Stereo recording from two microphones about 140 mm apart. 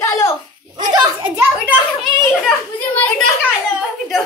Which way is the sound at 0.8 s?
30° right (ahead or behind).